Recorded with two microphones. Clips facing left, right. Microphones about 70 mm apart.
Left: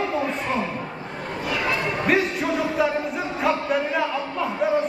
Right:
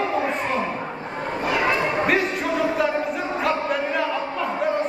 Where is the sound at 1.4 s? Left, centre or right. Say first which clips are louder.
Right 4 dB; right.